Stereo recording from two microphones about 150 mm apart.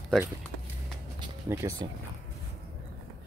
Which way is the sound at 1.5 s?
25° right (ahead or behind).